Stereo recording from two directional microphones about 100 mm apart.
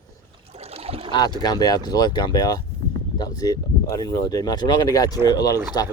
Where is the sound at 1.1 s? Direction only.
45° left (ahead or behind).